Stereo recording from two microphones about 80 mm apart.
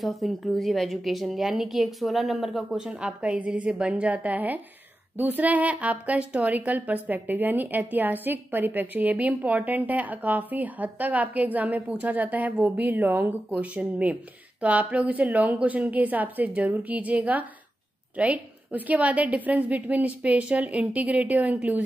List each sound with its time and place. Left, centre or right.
0.0 s a woman's voice: centre